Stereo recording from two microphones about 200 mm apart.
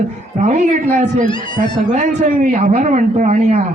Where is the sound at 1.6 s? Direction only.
40° right (ahead or behind).